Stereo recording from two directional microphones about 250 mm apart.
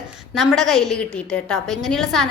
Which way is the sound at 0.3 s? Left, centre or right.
Centre.